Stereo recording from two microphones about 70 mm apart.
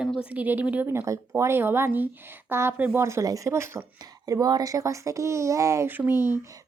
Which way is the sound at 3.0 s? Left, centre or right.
Right.